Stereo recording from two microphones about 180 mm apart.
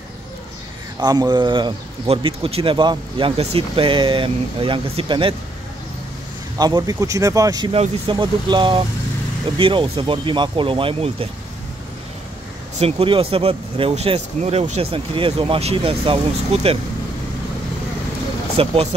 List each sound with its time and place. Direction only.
0.9 s speech: 20° right (ahead or behind)
6.6 s speech: 20° right (ahead or behind)
7.7 s speech: 30° right (ahead or behind)
12.7 s speech: 30° right (ahead or behind)
18.6 s speech: 30° right (ahead or behind)